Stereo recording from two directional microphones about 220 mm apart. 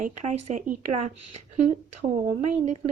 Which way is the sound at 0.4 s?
30° right (ahead or behind).